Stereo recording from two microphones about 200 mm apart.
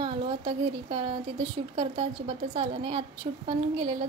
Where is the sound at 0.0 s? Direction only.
25° right (ahead or behind).